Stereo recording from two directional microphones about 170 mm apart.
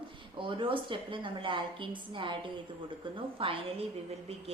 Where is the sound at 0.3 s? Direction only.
30° right (ahead or behind).